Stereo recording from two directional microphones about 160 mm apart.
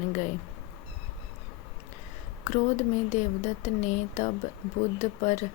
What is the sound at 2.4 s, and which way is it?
Speech, 45° left (ahead or behind).